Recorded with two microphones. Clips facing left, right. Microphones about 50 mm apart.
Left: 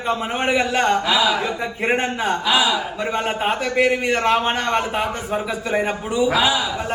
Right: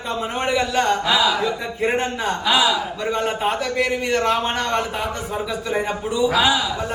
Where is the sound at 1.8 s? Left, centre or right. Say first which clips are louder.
Left 1 dB; left.